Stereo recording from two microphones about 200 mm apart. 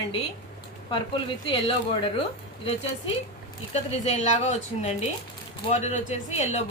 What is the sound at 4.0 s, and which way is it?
A man's voice, 35° left (ahead or behind).